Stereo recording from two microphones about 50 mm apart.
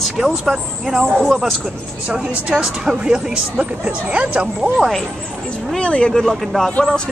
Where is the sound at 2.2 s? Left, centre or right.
Centre.